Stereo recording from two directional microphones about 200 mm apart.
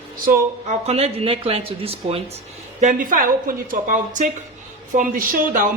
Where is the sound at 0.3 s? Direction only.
35° right (ahead or behind).